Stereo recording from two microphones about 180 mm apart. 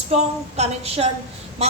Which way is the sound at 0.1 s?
35° right (ahead or behind).